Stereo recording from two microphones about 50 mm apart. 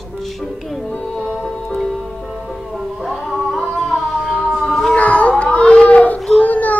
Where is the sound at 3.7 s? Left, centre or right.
Centre.